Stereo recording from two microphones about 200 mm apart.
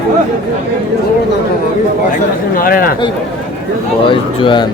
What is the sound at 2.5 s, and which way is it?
Speech, 45° left (ahead or behind).